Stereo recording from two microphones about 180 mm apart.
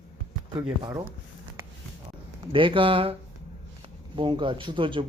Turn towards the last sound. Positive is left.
turn(degrees=-30)  # may be behind; listen again after turning